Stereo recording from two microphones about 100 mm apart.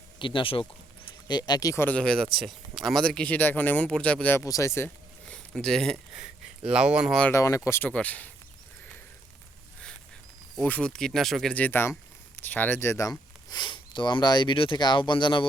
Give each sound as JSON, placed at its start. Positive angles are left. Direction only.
{"t": 0.2, "sound": "speech", "side_deg": 55}
{"t": 1.3, "sound": "speech", "side_deg": 45}
{"t": 1.7, "sound": "speech", "side_deg": 25}
{"t": 2.0, "sound": "speech", "side_deg": 10}
{"t": 2.3, "sound": "speech", "side_deg": 0}
{"t": 4.4, "sound": "speech", "side_deg": 30}
{"t": 5.2, "sound": "a sound", "side_deg": 5}
{"t": 6.7, "sound": "speech", "side_deg": -10}
{"t": 7.3, "sound": "speech", "side_deg": 35}
{"t": 7.9, "sound": "speech", "side_deg": 15}
{"t": 10.6, "sound": "speech", "side_deg": 10}
{"t": 11.5, "sound": "speech", "side_deg": 20}